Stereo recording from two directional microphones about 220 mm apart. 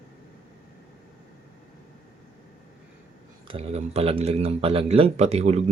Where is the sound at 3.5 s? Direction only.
25° right (ahead or behind).